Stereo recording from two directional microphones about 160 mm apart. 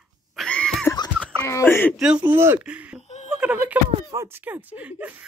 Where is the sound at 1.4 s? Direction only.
15° left (ahead or behind).